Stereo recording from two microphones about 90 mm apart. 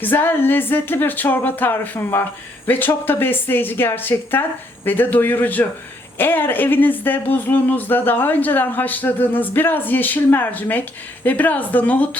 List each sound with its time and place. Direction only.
0.0 s speech: 20° left (ahead or behind)